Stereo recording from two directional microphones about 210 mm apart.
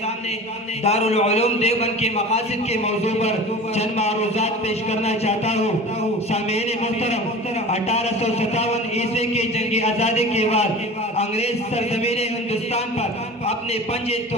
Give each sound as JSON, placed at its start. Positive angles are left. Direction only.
{"t": 0.8, "sound": "a man's voice", "side_deg": 30}